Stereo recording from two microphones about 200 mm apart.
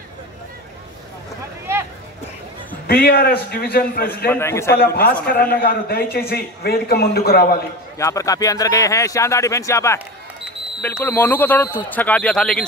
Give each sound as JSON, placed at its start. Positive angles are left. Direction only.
{"t": 2.9, "sound": "a man's voice", "side_deg": 50}
{"t": 4.3, "sound": "speech", "side_deg": 15}
{"t": 5.2, "sound": "a man's voice", "side_deg": 50}
{"t": 8.0, "sound": "speech", "side_deg": 15}